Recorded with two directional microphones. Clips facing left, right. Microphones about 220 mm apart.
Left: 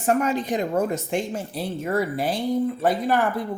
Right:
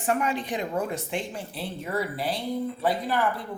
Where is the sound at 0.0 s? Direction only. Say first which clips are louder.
Left 5 dB; 40° left (ahead or behind).